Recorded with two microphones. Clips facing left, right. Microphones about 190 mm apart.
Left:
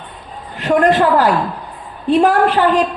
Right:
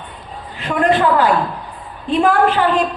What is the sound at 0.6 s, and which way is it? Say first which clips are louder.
Speech: left 3 dB; 40° left (ahead or behind).